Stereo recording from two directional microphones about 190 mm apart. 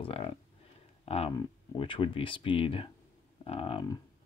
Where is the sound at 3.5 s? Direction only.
30° left (ahead or behind).